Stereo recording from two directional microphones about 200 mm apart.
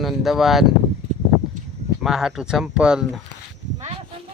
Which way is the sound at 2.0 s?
Centre (ahead or behind).